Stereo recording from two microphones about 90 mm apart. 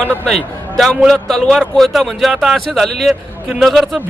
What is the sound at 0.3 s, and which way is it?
A man's voice, centre (ahead or behind).